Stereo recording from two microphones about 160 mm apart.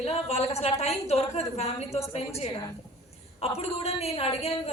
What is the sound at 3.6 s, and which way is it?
Speech, 40° left (ahead or behind).